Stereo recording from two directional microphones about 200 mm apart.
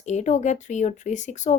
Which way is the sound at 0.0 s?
35° left (ahead or behind).